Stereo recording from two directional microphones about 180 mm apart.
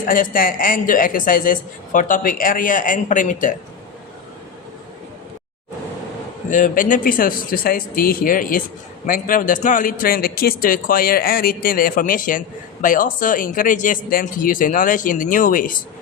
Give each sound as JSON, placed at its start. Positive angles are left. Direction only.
{"t": 0.0, "sound": "a man's voice", "side_deg": 50}
{"t": 6.5, "sound": "a man's voice", "side_deg": 45}